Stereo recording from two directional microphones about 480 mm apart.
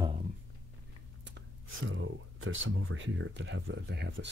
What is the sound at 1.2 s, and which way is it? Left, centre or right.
Speech, right.